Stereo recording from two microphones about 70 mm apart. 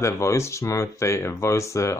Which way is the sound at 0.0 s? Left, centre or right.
Left.